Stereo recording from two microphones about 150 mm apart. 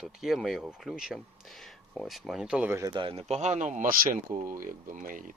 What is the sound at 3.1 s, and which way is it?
Speech, 45° right (ahead or behind).